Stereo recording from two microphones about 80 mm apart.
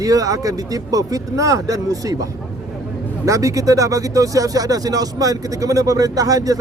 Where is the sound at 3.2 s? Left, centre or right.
Right.